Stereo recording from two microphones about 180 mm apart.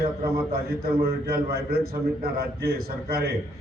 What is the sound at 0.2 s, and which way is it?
A man's voice, 60° right (ahead or behind).